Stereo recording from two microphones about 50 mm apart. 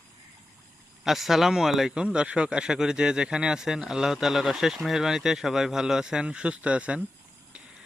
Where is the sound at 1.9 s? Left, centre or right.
Centre.